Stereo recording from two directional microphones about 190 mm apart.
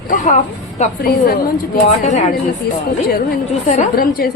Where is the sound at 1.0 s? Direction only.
50° left (ahead or behind).